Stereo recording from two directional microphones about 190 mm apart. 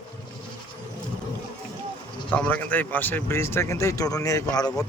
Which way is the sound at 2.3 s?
5° left (ahead or behind).